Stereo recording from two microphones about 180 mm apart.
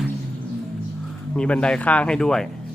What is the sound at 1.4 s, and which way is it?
Speech, 5° left (ahead or behind).